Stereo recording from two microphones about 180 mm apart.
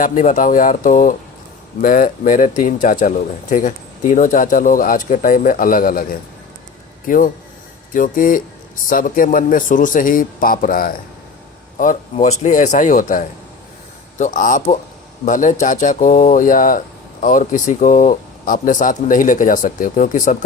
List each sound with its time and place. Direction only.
0.0 s speech: 45° left (ahead or behind)